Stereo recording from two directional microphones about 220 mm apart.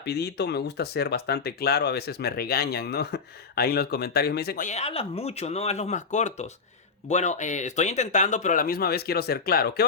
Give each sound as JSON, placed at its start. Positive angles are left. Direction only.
{"t": 0.0, "sound": "speech", "side_deg": 50}